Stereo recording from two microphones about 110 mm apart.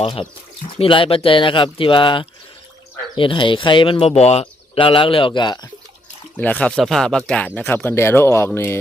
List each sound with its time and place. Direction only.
0.0 s speech: 60° left (ahead or behind)
4.1 s speech: 80° left; by 5.5 s 45° left (ahead or behind)
6.3 s speech: 15° left (ahead or behind)